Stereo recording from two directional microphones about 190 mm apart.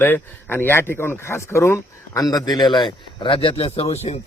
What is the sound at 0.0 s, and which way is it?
Speech, 10° left (ahead or behind).